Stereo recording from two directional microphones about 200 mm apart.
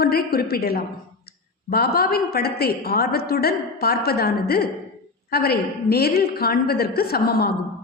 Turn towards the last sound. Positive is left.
turn(degrees=50)  # may be behind; listen again after turning